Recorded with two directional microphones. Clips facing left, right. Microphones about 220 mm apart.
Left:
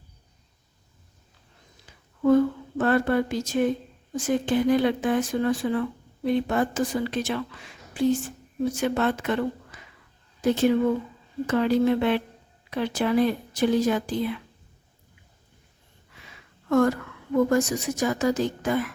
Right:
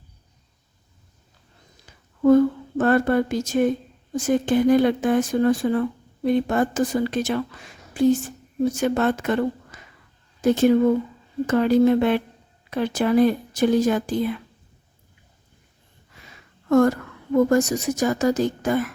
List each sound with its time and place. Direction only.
2.2 s speech: 45° right (ahead or behind)
16.6 s speech: 40° right (ahead or behind)